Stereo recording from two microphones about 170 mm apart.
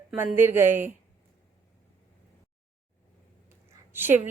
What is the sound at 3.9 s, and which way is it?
Speech, 10° right (ahead or behind).